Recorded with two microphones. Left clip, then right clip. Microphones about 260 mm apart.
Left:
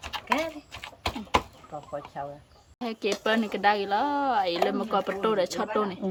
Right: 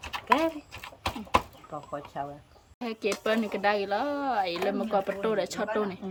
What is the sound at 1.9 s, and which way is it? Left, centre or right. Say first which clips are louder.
Speech: even; right.